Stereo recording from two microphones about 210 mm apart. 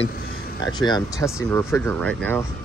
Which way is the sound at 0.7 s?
20° left (ahead or behind).